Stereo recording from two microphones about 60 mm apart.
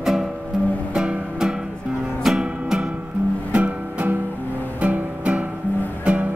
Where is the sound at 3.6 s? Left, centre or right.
Right.